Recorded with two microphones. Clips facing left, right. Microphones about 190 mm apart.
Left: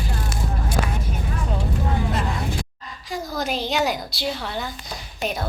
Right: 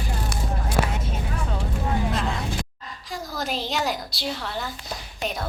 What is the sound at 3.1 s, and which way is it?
A woman's voice, centre (ahead or behind).